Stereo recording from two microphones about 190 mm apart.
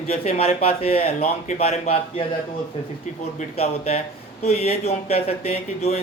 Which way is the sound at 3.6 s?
35° left (ahead or behind).